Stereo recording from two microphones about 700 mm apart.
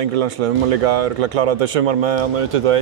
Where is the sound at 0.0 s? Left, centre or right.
Right.